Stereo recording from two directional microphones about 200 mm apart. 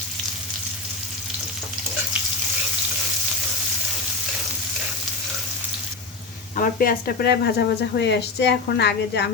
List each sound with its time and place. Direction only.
6.6 s speech: 45° left (ahead or behind)